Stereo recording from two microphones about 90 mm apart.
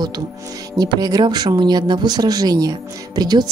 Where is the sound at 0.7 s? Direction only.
45° right (ahead or behind).